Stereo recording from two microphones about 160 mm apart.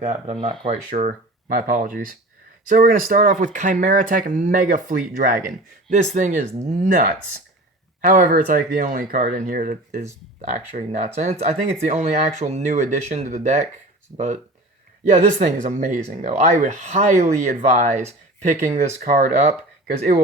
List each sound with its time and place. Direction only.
0.0 s speech: 45° right (ahead or behind)
1.0 s speech: 60° right (ahead or behind); by 13.7 s 45° right (ahead or behind)
14.1 s speech: 35° right (ahead or behind)
15.4 s speech: 50° right (ahead or behind)